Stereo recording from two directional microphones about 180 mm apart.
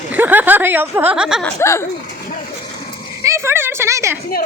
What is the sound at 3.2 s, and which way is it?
Speech, 15° right (ahead or behind).